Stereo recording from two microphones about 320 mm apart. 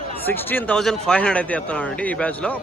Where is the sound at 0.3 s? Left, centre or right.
Centre.